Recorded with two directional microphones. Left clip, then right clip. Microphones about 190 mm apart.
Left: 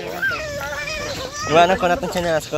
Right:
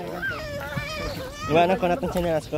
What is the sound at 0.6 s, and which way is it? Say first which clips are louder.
Children playing: left 5 dB; 35° left (ahead or behind).